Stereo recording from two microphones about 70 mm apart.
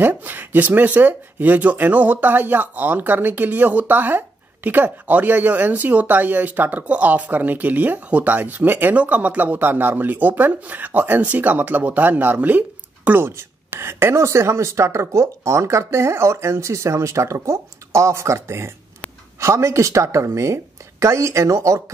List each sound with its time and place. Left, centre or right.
0.0 s speech: right
13.4 s speech: right